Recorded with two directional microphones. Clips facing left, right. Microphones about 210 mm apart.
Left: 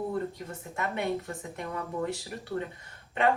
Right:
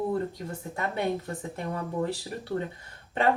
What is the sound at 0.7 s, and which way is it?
Speech, 35° right (ahead or behind).